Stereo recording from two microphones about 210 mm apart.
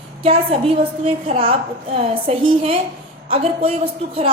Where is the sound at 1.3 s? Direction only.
30° right (ahead or behind).